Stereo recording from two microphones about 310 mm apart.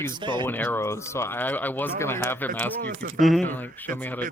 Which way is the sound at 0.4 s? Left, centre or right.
Centre.